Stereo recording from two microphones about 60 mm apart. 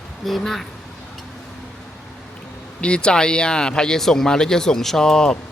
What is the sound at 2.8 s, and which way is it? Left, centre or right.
Speech, centre.